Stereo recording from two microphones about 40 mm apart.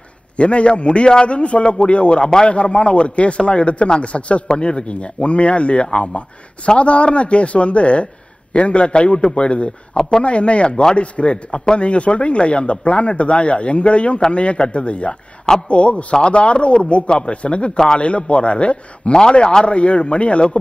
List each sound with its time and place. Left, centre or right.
0.4 s speech: left